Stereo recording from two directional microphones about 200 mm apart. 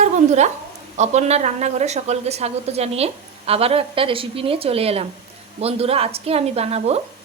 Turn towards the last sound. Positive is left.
turn(degrees=-30)  # may be behind; listen again after turning